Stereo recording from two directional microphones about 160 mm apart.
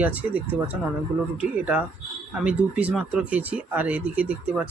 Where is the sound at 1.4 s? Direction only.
5° right (ahead or behind).